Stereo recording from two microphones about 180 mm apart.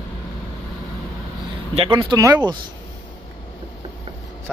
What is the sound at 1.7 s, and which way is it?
Speech, 30° right (ahead or behind).